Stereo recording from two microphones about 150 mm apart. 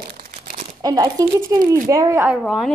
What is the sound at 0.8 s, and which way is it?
A child's voice, 25° right (ahead or behind).